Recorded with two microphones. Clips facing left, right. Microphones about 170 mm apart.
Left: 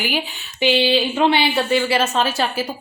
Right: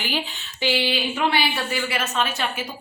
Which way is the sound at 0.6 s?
25° left (ahead or behind).